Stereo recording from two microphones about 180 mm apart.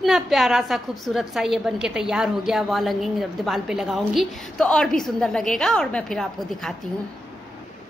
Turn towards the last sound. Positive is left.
turn(degrees=0)  # may be behind; listen again after turning